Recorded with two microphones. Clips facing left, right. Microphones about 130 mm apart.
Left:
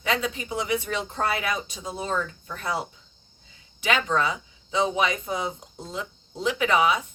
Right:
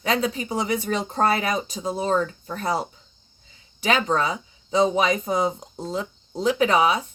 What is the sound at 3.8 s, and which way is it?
Speech, 35° right (ahead or behind).